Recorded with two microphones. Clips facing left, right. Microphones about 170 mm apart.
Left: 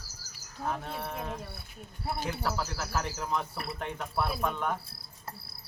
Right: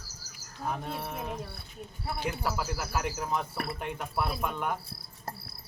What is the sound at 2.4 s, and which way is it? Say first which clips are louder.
A man's voice: right 1 dB; 10° right (ahead or behind).